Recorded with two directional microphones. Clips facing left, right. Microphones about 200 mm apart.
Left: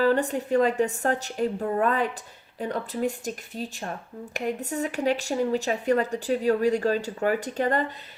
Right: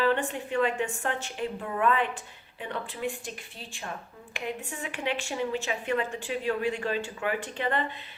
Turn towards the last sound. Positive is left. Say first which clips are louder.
# left 5 dB
turn(degrees=40)  # may be behind; listen again after turning